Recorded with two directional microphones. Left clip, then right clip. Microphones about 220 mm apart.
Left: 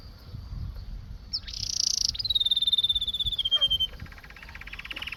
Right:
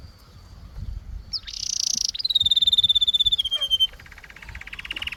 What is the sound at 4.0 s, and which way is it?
Vehicle, 15° right (ahead or behind).